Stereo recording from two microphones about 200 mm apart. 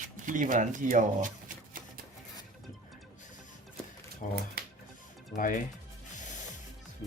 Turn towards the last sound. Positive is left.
turn(degrees=40)  # may be behind; listen again after turning